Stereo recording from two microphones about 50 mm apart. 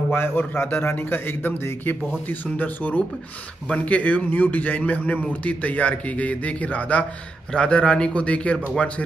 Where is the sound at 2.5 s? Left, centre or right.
Left.